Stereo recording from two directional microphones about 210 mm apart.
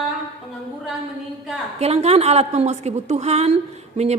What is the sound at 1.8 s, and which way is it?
A woman's voice, 30° right (ahead or behind).